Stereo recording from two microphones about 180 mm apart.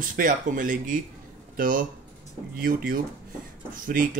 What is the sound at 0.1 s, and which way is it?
Speech, 45° right (ahead or behind).